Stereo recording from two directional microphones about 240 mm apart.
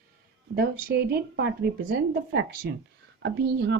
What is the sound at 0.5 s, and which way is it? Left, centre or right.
Speech, right.